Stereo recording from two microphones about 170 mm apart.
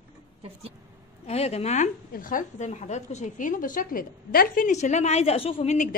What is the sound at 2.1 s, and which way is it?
A woman's voice, 50° left (ahead or behind).